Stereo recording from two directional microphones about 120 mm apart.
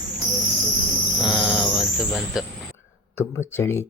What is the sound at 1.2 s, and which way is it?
Mantra, 5° right (ahead or behind).